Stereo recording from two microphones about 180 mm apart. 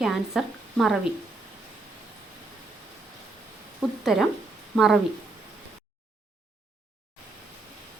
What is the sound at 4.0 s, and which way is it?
Speech, centre (ahead or behind).